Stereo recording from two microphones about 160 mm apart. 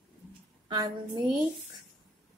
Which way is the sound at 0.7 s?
25° right (ahead or behind).